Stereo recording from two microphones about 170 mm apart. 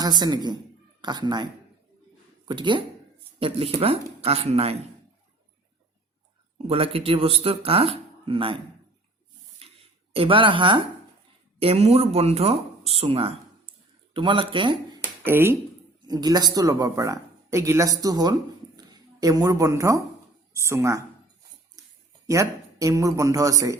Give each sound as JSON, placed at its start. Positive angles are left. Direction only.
{"t": 0.0, "sound": "speech", "side_deg": -25}
{"t": 2.5, "sound": "speech", "side_deg": -30}
{"t": 6.7, "sound": "speech", "side_deg": -35}
{"t": 10.1, "sound": "speech", "side_deg": -35}
{"t": 15.2, "sound": "speech", "side_deg": -15}
{"t": 16.0, "sound": "a woman's voice", "side_deg": -25}
{"t": 21.8, "sound": "a sound", "side_deg": -20}
{"t": 22.3, "sound": "speech", "side_deg": -20}